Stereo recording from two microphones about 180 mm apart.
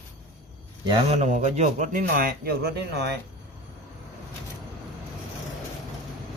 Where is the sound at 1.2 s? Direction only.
40° right (ahead or behind); by 3.0 s 65° right (ahead or behind).